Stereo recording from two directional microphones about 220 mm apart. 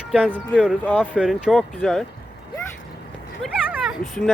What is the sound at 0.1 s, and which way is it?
Speech, 5° right (ahead or behind).